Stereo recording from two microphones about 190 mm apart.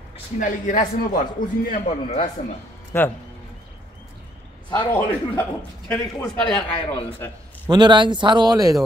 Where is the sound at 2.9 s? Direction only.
10° left (ahead or behind).